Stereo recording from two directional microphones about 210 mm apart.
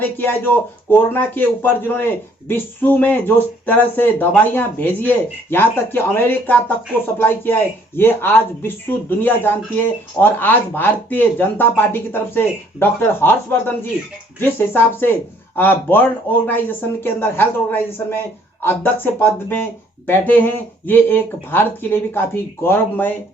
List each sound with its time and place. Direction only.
0.0 s speech: 10° left (ahead or behind)